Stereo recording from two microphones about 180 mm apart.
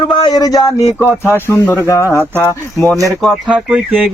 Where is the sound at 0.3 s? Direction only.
20° left (ahead or behind).